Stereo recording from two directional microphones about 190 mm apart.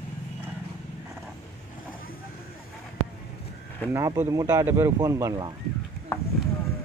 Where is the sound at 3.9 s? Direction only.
15° right (ahead or behind).